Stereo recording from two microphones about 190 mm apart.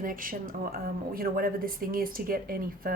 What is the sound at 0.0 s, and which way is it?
A woman's voice, 45° right (ahead or behind).